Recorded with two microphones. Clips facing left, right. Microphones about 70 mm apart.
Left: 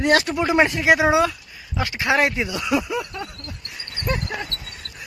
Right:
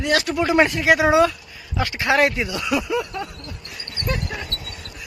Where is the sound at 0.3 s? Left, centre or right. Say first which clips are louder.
Right 1 dB; centre.